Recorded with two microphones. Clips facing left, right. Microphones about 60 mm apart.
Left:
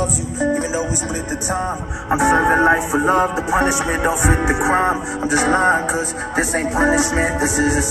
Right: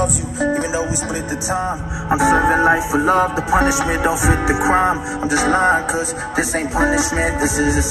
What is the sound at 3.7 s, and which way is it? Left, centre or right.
Speech, centre.